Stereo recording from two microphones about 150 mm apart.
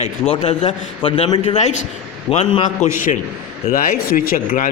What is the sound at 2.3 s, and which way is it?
Speech, 40° left (ahead or behind).